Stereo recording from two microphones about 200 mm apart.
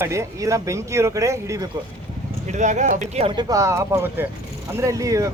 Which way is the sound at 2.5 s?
35° right (ahead or behind).